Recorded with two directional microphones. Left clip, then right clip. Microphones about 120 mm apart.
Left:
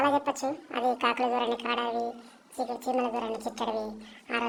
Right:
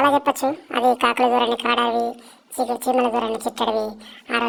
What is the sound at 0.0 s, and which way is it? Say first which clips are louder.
A woman's voice: right 9 dB; 40° right (ahead or behind).